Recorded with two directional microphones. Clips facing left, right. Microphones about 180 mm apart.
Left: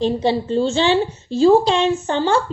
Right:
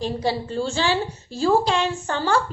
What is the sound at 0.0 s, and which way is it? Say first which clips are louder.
A woman's voice: left 6 dB; 25° left (ahead or behind).